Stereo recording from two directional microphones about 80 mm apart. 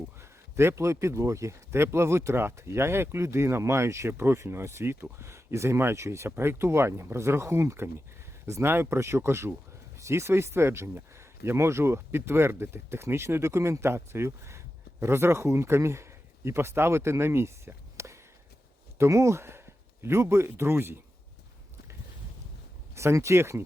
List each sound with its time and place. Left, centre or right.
0.2 s a man's voice: right
23.0 s speech: right